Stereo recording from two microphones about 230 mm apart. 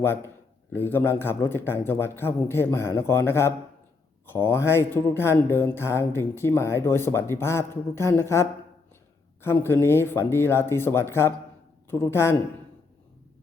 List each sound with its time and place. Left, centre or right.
0.0 s speech: centre